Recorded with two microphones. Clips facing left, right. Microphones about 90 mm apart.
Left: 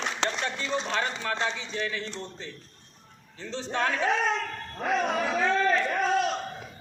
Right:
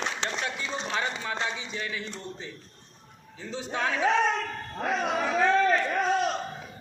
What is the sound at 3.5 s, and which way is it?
Speech, 10° right (ahead or behind).